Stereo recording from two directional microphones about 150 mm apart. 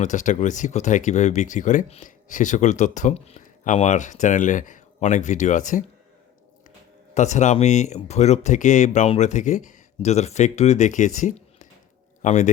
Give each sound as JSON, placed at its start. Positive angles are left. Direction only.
{"t": 0.0, "sound": "speech", "side_deg": 55}
{"t": 3.4, "sound": "speech", "side_deg": 60}
{"t": 7.1, "sound": "speech", "side_deg": 50}